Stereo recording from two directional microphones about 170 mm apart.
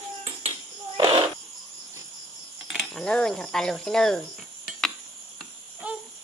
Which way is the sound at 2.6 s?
Centre (ahead or behind).